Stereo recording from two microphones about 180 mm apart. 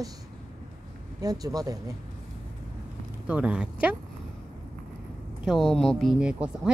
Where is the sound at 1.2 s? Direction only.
20° right (ahead or behind).